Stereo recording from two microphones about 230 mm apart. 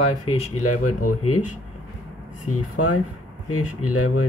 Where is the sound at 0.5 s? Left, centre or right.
Left.